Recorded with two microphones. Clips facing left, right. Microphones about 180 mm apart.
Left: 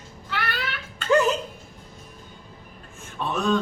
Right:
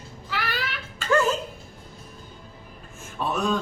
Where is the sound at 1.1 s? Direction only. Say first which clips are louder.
Left 2 dB; 15° left (ahead or behind).